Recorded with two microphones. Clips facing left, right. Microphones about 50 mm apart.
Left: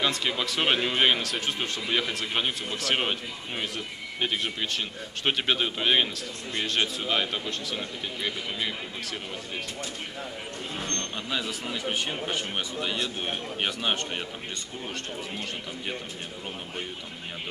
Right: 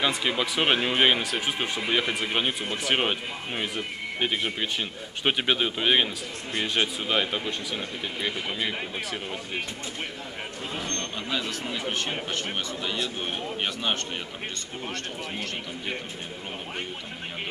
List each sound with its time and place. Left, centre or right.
0.0 s a man's voice: centre
11.2 s a man's voice: centre
13.2 s a man's voice: centre